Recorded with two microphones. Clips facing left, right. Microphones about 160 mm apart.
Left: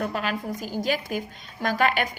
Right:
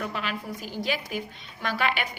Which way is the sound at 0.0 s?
40° left (ahead or behind).